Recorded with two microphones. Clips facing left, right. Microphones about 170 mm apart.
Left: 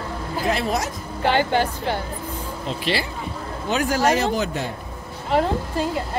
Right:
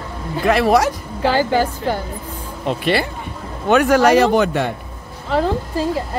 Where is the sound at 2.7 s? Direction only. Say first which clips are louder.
Right 7 dB; 55° right (ahead or behind).